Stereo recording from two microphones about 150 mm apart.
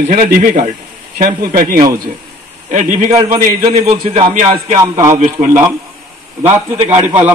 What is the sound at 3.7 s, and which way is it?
Speech, 35° right (ahead or behind).